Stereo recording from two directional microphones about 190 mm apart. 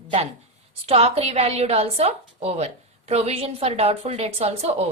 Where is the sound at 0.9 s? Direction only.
30° right (ahead or behind).